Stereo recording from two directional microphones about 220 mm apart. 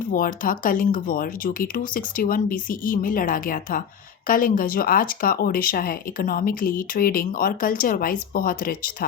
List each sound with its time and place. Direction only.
0.1 s speech: 40° left (ahead or behind)